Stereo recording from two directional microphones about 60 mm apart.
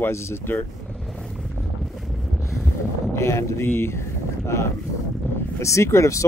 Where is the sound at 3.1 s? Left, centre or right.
Left.